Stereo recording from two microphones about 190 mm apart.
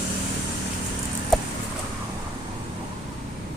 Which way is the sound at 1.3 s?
Centre (ahead or behind).